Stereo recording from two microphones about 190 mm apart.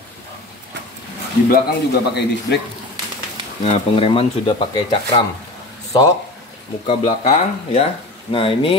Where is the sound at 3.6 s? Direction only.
30° left (ahead or behind).